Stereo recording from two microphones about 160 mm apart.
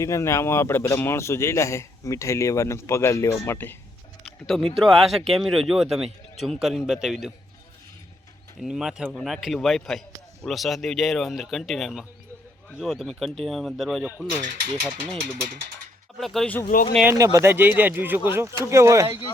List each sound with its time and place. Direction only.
0.0 s a man's voice: 20° left (ahead or behind)
4.3 s speech: centre (ahead or behind)
8.6 s speech: 5° right (ahead or behind)
15.0 s speech: 50° right (ahead or behind)
16.1 s speech: centre (ahead or behind)
16.6 s speech: 45° left (ahead or behind)
17.0 s speech: 15° right (ahead or behind)